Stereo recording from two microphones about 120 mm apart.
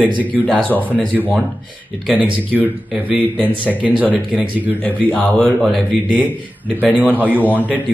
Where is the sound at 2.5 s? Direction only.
15° right (ahead or behind).